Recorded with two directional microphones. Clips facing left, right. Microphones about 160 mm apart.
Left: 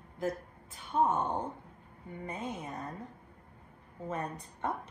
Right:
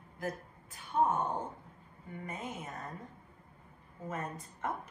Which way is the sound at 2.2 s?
30° left (ahead or behind).